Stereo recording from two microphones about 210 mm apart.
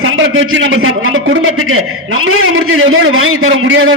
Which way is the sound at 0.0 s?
70° right (ahead or behind).